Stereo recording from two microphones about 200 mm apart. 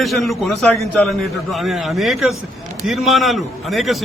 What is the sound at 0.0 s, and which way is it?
A man's voice, centre (ahead or behind).